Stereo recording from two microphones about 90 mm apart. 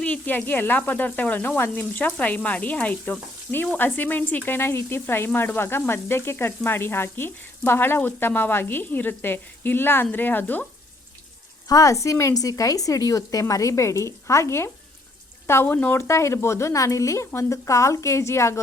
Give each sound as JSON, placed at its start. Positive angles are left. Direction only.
{"t": 0.0, "sound": "frying", "side_deg": 15}
{"t": 11.7, "sound": "a woman's voice", "side_deg": 40}